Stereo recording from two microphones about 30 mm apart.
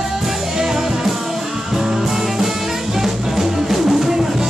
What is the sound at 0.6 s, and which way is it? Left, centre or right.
Music, centre.